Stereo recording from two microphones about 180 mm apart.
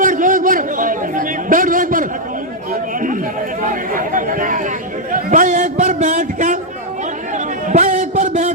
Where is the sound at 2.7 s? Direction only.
50° right (ahead or behind).